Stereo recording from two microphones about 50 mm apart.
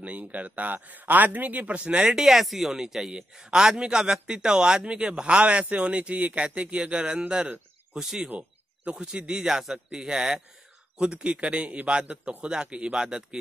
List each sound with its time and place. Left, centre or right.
0.0 s speech: right
2.1 s a man's voice: centre
8.3 s a man's voice: right